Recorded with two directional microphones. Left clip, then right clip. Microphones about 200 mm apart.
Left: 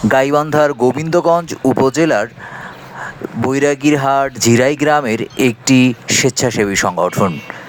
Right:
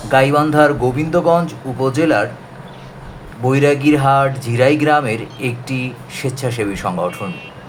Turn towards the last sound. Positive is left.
turn(degrees=50)  # may be behind; listen again after turning